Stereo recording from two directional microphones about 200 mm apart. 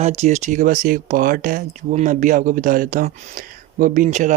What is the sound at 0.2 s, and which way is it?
Speech, 35° right (ahead or behind).